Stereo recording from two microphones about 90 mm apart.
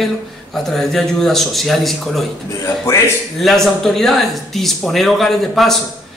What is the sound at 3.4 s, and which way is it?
Speech, 5° left (ahead or behind).